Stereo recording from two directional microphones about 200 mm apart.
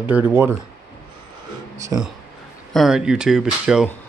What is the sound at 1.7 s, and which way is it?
Speech, 15° right (ahead or behind).